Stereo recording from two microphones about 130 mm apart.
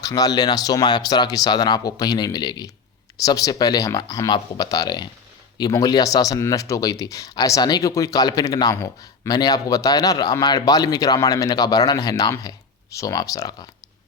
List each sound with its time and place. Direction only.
0.0 s speech: 30° left (ahead or behind)